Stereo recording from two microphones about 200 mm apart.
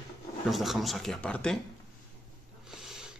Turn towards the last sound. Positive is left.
turn(degrees=0)  # may be behind; listen again after turning